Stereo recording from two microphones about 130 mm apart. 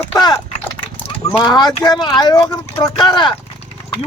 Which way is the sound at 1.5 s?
30° left (ahead or behind).